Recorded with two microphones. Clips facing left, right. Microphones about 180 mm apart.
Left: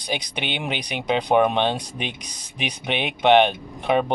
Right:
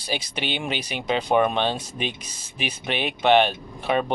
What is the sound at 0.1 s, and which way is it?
Speech, 15° left (ahead or behind).